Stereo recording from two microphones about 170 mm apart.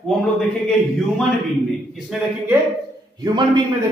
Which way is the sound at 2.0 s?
5° right (ahead or behind).